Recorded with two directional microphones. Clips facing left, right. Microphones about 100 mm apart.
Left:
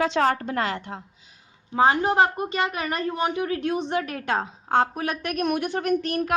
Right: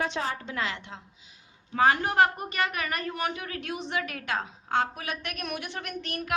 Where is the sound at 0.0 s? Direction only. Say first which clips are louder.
Left 9 dB; 80° left; by 1.0 s 45° left (ahead or behind).